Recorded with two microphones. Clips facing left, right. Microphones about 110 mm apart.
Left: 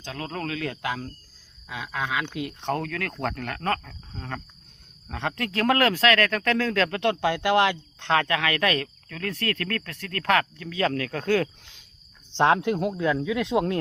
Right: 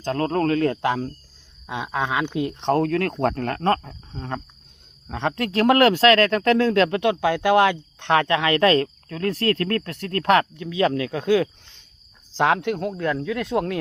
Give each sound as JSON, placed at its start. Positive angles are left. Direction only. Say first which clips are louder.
{"t": 0.0, "sound": "speech", "louder": "right 11 dB", "side_deg": -45}
{"t": 1.6, "sound": "speech", "louder": "right 5 dB", "side_deg": -25}
{"t": 2.3, "sound": "speech", "louder": "right 7 dB", "side_deg": 0}
{"t": 2.6, "sound": "speech", "louder": "right 9 dB", "side_deg": -30}
{"t": 7.0, "sound": "speech", "louder": "right 3 dB", "side_deg": -10}
{"t": 12.3, "sound": "speech", "louder": "even", "side_deg": 0}